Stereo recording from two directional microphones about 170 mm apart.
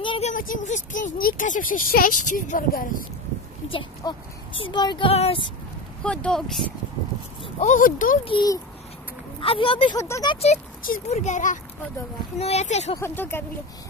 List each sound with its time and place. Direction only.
0.0 s a sound: 30° left (ahead or behind)
0.3 s speech: 50° left (ahead or behind)
3.6 s speech: 30° left (ahead or behind)
6.0 s speech: 5° left (ahead or behind)
7.4 s speech: 45° left (ahead or behind)
8.3 s a child's voice: 25° left (ahead or behind)
9.9 s speech: 20° left (ahead or behind)
10.3 s speech: 40° left (ahead or behind)
12.9 s speech: 15° left (ahead or behind)